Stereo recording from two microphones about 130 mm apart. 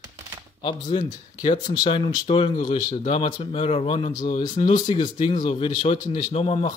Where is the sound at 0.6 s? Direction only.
35° left (ahead or behind).